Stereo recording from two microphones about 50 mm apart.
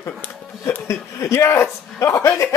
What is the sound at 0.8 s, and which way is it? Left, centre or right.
A man's voice, left.